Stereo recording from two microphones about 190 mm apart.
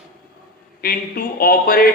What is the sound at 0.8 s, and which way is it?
Speech, 50° left (ahead or behind).